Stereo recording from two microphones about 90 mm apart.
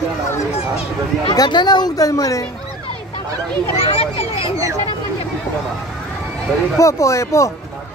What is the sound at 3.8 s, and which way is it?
Speech, 90° left.